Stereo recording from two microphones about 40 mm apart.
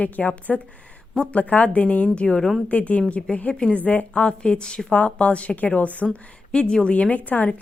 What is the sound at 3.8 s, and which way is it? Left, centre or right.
Speech, left.